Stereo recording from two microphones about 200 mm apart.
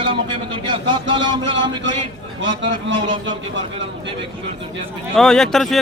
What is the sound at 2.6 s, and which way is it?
Speech, 65° right (ahead or behind).